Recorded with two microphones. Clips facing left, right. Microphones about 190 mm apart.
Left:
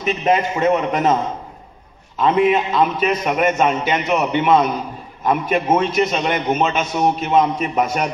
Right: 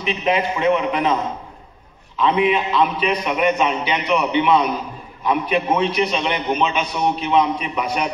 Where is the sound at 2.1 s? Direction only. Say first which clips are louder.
Left 2 dB; 45° left (ahead or behind).